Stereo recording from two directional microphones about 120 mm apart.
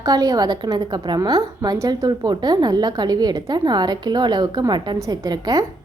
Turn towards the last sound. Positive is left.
turn(degrees=-30)  # may be behind; listen again after turning